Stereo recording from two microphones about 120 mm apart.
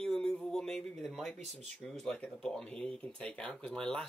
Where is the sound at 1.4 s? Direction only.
70° right (ahead or behind).